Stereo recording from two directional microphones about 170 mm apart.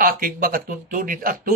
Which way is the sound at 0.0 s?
60° right (ahead or behind).